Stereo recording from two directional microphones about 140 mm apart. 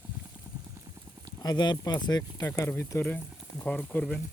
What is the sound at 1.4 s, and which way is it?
Speech, 30° left (ahead or behind).